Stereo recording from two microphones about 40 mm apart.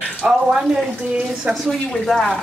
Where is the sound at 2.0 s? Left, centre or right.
Centre.